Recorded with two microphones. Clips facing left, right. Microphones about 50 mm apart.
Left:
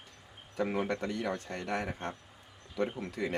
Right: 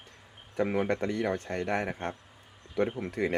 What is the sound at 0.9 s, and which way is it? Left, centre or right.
Speech, right.